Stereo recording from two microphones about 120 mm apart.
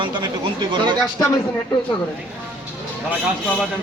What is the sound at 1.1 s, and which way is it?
Speech, 30° left (ahead or behind).